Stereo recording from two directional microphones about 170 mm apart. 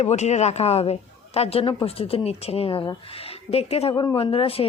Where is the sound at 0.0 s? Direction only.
40° left (ahead or behind).